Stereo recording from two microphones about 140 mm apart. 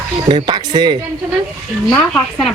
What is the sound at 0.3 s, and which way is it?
Speech, 35° right (ahead or behind).